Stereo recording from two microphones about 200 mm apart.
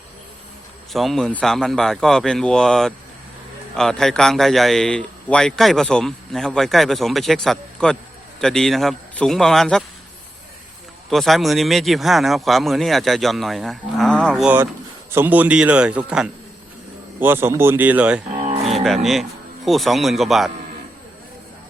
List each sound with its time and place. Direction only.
0.9 s speech: centre (ahead or behind)
11.1 s a man's voice: centre (ahead or behind)
18.4 s cattle: 30° right (ahead or behind)
18.7 s livestock: centre (ahead or behind)
19.6 s speech: centre (ahead or behind)